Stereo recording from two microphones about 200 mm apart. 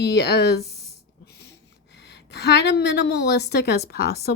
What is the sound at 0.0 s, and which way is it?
Speech, 55° left (ahead or behind).